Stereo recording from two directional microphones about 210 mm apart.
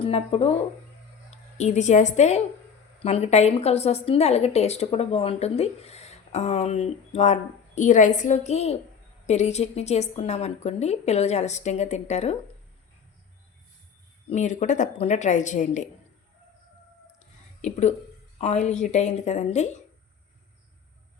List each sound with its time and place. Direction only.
0.0 s a woman's voice: 30° left (ahead or behind)
14.3 s a woman's voice: 35° left (ahead or behind)
17.6 s a woman's voice: 35° left (ahead or behind)